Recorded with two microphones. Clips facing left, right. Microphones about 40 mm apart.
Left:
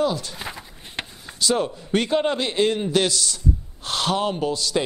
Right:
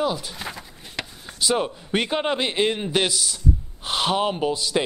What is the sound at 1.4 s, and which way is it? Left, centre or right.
A man's voice, centre.